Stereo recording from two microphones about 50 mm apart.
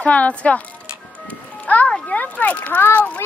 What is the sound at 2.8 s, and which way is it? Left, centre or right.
Speech, left.